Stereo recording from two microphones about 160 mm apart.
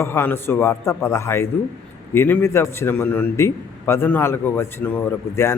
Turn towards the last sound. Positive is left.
turn(degrees=15)  # may be behind; listen again after turning